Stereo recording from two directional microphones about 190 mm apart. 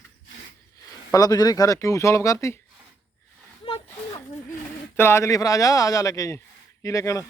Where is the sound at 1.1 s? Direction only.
20° left (ahead or behind).